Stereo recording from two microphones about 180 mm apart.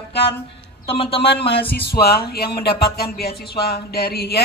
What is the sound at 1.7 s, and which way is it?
Speech, 60° left (ahead or behind).